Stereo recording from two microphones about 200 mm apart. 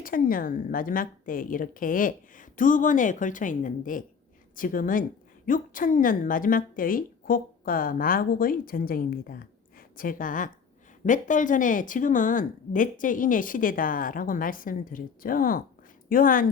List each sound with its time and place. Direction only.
0.0 s a woman's voice: 45° left (ahead or behind)